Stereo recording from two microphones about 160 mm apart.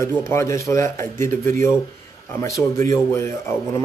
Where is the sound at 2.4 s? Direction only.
20° left (ahead or behind).